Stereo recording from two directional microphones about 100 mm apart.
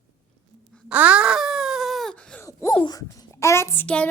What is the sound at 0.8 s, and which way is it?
Wail, 15° right (ahead or behind).